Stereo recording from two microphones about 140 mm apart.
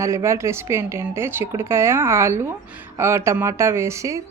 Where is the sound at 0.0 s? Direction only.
20° right (ahead or behind).